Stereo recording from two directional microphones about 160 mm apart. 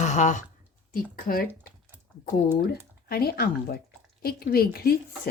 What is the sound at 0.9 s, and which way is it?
Speech, 60° left (ahead or behind).